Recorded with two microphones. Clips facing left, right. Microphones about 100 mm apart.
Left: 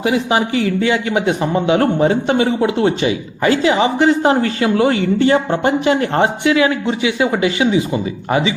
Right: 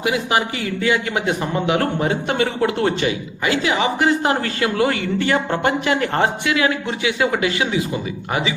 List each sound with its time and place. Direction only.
0.0 s speech: 30° left (ahead or behind)
3.4 s speech: 35° left (ahead or behind)